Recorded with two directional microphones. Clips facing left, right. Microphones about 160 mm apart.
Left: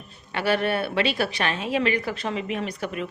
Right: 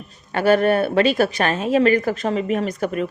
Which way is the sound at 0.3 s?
45° right (ahead or behind).